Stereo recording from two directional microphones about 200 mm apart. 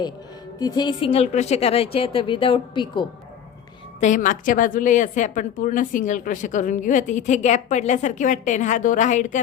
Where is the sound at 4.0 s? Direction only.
40° left (ahead or behind).